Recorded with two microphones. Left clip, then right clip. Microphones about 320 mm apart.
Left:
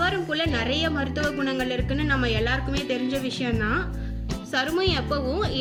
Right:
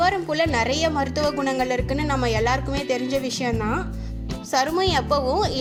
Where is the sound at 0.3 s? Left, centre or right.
Centre.